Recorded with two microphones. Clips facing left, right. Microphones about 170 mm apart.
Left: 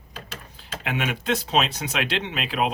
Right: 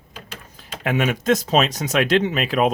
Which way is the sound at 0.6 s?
45° right (ahead or behind).